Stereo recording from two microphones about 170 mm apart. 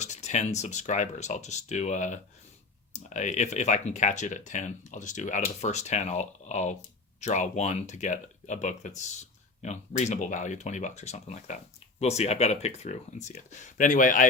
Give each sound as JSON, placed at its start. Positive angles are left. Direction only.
{"t": 0.0, "sound": "speech", "side_deg": 45}